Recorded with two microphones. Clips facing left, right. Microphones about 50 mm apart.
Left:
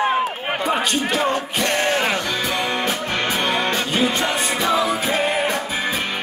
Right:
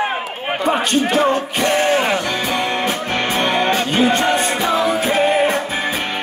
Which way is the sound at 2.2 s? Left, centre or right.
Right.